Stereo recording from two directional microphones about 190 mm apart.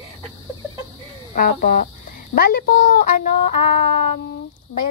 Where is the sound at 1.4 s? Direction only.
50° left (ahead or behind).